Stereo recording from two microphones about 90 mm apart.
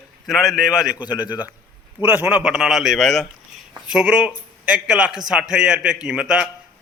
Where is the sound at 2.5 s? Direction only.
5° right (ahead or behind).